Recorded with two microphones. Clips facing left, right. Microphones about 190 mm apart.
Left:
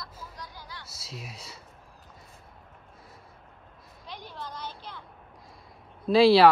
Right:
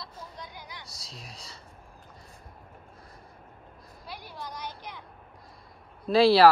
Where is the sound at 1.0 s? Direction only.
5° left (ahead or behind).